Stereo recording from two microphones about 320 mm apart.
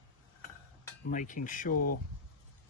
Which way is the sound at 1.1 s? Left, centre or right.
Left.